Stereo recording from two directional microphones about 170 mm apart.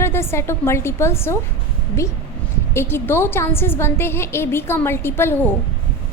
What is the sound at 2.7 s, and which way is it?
A woman's voice, 15° left (ahead or behind).